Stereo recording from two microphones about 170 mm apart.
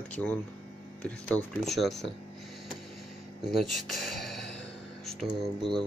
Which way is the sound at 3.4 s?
Centre (ahead or behind).